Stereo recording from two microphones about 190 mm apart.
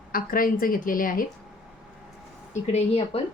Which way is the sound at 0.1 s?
50° left (ahead or behind).